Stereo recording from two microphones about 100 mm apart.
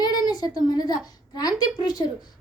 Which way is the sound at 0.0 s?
40° left (ahead or behind).